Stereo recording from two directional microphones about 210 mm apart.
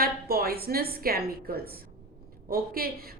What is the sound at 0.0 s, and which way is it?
A woman's voice, 45° right (ahead or behind).